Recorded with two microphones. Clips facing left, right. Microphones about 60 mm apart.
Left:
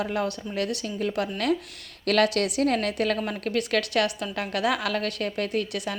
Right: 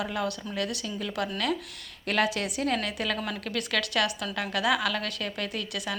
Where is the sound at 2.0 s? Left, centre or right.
Left.